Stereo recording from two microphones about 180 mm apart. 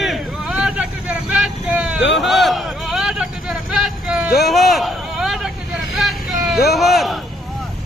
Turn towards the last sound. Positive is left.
turn(degrees=0)  # may be behind; listen again after turning